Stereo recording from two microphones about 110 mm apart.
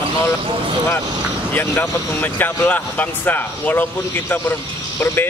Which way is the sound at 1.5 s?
20° left (ahead or behind).